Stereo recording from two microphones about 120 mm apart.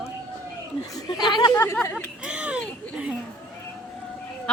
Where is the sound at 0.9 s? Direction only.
35° left (ahead or behind).